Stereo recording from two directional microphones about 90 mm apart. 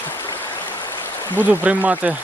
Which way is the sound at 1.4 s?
20° right (ahead or behind).